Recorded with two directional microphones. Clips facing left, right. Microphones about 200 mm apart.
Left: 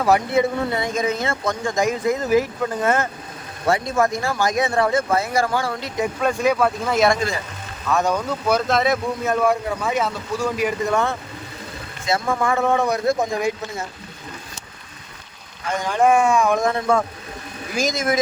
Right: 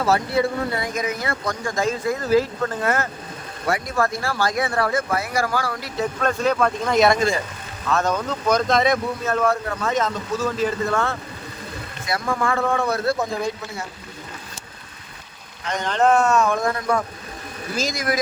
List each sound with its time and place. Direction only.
0.0 s speech: 20° left (ahead or behind)
6.1 s speech: 10° left (ahead or behind)
15.6 s speech: 10° left (ahead or behind)